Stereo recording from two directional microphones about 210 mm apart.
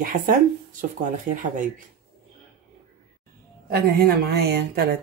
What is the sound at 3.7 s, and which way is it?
A woman's voice, 50° right (ahead or behind).